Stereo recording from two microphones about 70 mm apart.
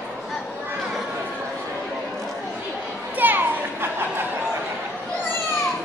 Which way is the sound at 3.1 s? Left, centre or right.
Right.